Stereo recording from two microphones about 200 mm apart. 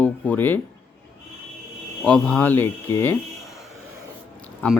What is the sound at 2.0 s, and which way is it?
Speech, 5° left (ahead or behind).